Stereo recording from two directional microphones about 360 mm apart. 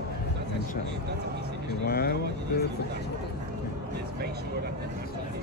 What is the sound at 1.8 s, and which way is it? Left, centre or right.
Speech, left.